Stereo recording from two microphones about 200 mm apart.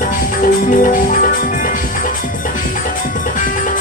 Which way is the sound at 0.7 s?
40° left (ahead or behind).